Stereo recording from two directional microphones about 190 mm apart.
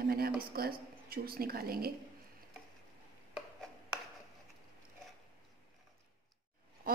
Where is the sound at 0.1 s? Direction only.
50° right (ahead or behind).